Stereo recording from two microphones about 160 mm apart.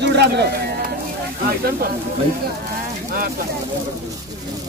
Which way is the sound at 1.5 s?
70° right (ahead or behind).